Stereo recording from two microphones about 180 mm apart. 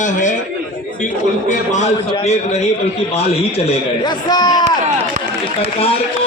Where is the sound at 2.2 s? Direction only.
35° left (ahead or behind).